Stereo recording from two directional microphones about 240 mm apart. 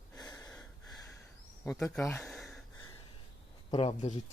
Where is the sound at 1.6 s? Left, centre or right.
Centre.